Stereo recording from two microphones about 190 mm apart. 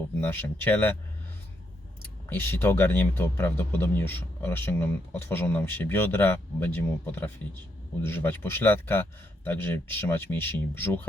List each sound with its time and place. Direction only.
0.2 s speech: 10° left (ahead or behind)
2.3 s speech: 10° left (ahead or behind)